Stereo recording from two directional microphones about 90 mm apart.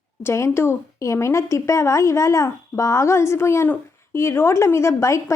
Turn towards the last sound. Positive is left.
turn(degrees=35)  # may be behind; listen again after turning